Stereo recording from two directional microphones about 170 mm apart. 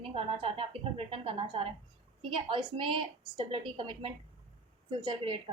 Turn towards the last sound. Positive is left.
turn(degrees=-30)  # may be behind; listen again after turning